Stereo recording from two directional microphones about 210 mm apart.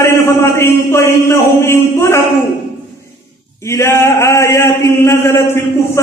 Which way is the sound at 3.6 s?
15° left (ahead or behind).